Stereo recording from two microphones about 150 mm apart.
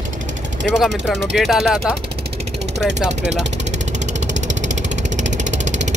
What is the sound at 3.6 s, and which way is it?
Vehicle, 50° right (ahead or behind).